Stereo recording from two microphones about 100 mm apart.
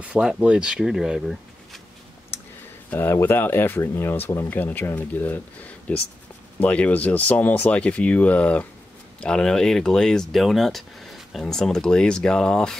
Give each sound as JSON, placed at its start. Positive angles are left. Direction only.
{"t": 0.0, "sound": "speech", "side_deg": -10}
{"t": 2.3, "sound": "a sound", "side_deg": 25}
{"t": 2.9, "sound": "speech", "side_deg": 25}